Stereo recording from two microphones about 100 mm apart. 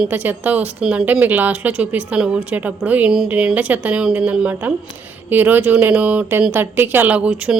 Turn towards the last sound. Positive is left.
turn(degrees=-10)  # may be behind; listen again after turning